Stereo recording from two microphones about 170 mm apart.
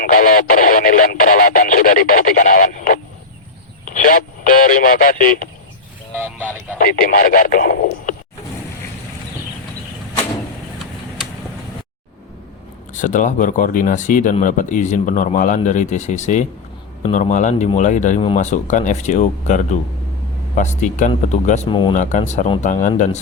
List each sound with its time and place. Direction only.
0.0 s speech: 60° left (ahead or behind)
6.1 s a sound: 10° right (ahead or behind)
6.7 s speech: 55° left (ahead or behind)
12.9 s speech: 50° left (ahead or behind)
21.7 s speech: 30° left (ahead or behind)
21.9 s speech: 45° left (ahead or behind)